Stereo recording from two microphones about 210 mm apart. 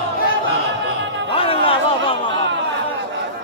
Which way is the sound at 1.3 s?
25° left (ahead or behind).